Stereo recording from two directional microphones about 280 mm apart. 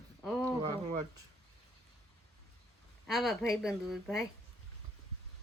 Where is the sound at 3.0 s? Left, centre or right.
Centre.